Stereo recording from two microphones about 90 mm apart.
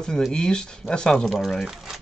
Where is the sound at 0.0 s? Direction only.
10° left (ahead or behind).